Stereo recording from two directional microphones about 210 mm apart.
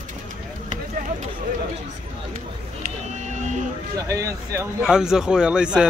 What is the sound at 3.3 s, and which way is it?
Vehicle, 35° right (ahead or behind).